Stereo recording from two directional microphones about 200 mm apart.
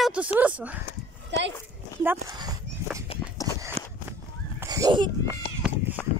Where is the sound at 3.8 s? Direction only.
30° right (ahead or behind).